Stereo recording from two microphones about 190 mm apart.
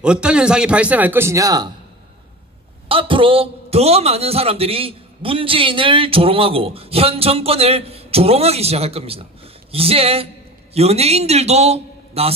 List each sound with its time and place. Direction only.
0.0 s a man's voice: 5° right (ahead or behind)
2.9 s a man's voice: 25° right (ahead or behind)